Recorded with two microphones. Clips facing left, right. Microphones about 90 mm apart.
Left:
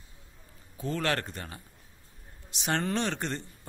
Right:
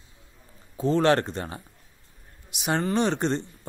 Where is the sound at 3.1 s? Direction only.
25° right (ahead or behind).